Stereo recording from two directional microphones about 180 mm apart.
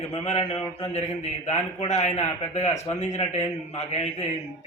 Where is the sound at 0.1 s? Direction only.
30° left (ahead or behind).